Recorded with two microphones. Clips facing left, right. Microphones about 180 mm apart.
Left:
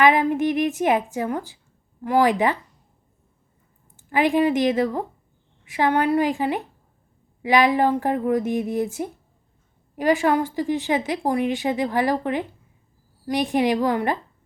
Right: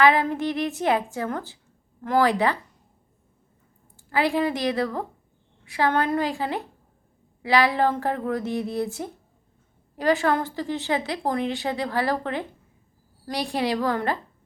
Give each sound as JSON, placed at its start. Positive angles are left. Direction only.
{"t": 0.0, "sound": "a woman's voice", "side_deg": 15}
{"t": 3.9, "sound": "a woman's voice", "side_deg": 15}